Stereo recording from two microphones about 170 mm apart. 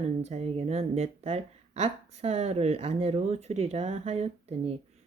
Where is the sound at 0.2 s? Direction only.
40° right (ahead or behind).